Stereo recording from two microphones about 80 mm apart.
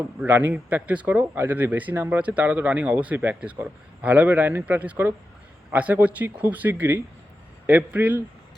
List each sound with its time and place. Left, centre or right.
0.3 s speech: right